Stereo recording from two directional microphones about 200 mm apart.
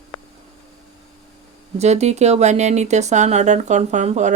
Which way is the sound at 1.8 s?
35° right (ahead or behind).